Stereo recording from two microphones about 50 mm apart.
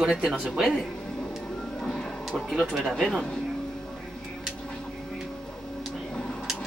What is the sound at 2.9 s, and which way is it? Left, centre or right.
Speech, centre.